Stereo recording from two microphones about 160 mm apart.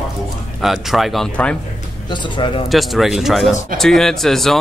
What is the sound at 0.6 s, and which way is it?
Speech, centre (ahead or behind).